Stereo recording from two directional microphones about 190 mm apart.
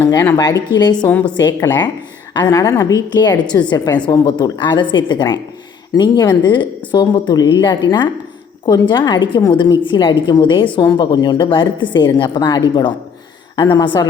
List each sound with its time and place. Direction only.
0.1 s a woman's voice: 20° left (ahead or behind)